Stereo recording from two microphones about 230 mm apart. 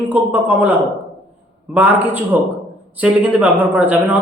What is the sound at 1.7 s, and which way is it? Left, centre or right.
Speech, centre.